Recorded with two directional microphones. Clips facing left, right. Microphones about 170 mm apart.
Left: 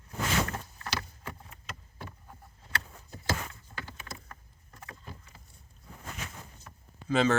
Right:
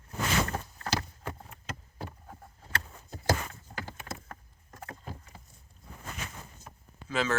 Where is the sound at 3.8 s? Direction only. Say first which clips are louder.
Right 4 dB; 45° right (ahead or behind).